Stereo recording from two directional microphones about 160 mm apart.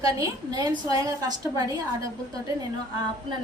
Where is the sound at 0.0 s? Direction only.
25° right (ahead or behind).